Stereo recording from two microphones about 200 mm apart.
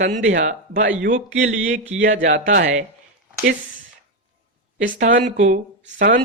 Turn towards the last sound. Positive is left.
turn(degrees=-40)  # may be behind; listen again after turning